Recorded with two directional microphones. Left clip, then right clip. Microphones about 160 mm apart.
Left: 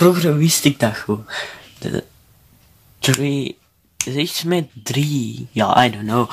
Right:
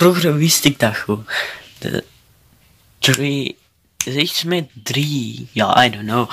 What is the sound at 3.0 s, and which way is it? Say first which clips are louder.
Speech: right 3 dB; 5° left (ahead or behind).